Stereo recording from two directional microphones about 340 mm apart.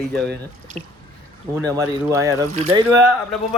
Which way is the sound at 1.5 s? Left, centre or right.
Centre.